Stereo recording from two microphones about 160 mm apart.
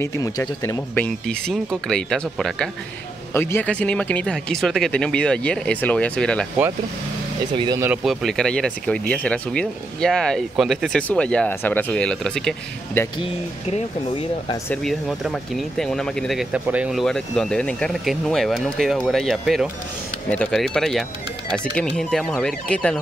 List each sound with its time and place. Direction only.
0.0 s speech: 20° left (ahead or behind)
3.3 s speech: 15° left (ahead or behind)
7.5 s speech: 30° right (ahead or behind)
7.8 s speech: 5° right (ahead or behind)
13.0 s speech: 15° left (ahead or behind)
14.7 s speech: centre (ahead or behind)